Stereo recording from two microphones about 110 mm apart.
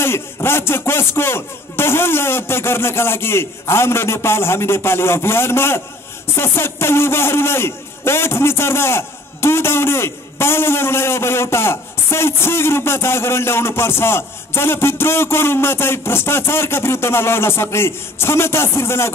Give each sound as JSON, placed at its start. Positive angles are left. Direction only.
{"t": 0.0, "sound": "a man's voice", "side_deg": 20}